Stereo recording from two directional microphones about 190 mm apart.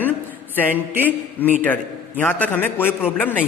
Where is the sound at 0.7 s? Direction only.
10° right (ahead or behind).